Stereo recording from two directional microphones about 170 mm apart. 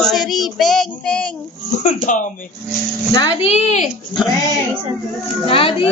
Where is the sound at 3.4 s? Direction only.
40° left (ahead or behind).